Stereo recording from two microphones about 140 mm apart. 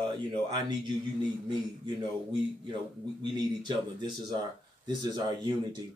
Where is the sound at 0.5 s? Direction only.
30° right (ahead or behind).